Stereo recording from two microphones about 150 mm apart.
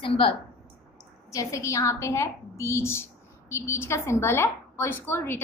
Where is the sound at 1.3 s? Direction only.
20° left (ahead or behind).